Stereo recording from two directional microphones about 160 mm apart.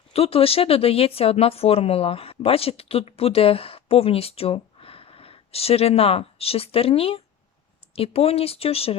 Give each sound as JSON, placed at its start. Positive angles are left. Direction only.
{"t": 0.1, "sound": "speech", "side_deg": 35}